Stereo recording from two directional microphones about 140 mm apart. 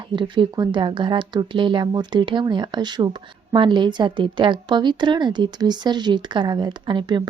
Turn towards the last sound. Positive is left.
turn(degrees=-35)  # may be behind; listen again after turning